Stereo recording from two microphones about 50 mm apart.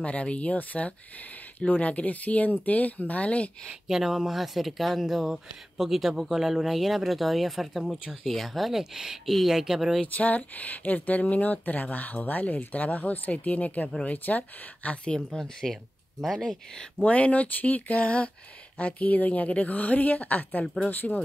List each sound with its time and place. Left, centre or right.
0.0 s speech: left
3.6 s speech: centre
10.1 s speech: left
15.1 s speech: centre
16.3 s speech: centre
17.0 s speech: left